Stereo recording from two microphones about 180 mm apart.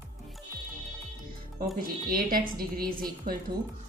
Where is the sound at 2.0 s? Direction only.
55° right (ahead or behind).